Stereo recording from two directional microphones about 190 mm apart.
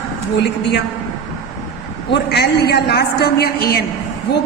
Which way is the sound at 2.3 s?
55° left (ahead or behind).